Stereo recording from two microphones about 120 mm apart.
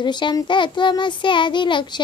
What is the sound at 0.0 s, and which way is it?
A child's voice, 40° left (ahead or behind).